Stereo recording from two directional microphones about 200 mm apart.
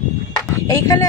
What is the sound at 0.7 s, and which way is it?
Speech, 15° left (ahead or behind).